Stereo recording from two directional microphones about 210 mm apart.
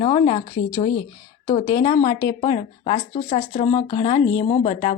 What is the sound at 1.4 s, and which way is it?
Speech, 20° left (ahead or behind).